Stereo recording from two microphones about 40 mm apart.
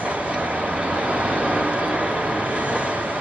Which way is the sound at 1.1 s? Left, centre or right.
Right.